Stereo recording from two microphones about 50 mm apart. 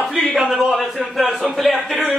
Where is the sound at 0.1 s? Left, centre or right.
Centre.